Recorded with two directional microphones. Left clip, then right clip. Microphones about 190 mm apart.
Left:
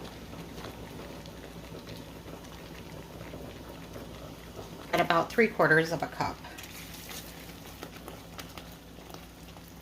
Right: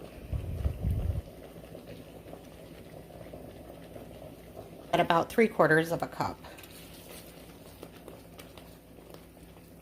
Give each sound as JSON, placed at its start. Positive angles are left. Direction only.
{"t": 4.9, "sound": "speech", "side_deg": -35}